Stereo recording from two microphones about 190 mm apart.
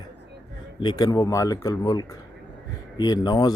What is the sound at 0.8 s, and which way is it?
Speech, 20° left (ahead or behind).